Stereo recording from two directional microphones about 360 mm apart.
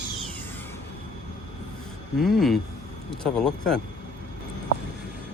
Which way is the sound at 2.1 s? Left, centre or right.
Centre.